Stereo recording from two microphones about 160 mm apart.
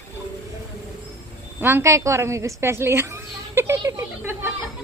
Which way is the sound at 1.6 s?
15° right (ahead or behind).